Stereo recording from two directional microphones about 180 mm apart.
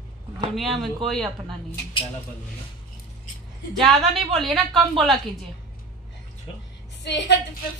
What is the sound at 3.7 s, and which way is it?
A woman's voice, centre (ahead or behind).